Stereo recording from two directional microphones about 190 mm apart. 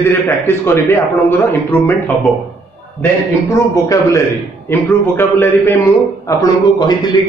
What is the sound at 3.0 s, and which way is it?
A man's voice, 15° left (ahead or behind).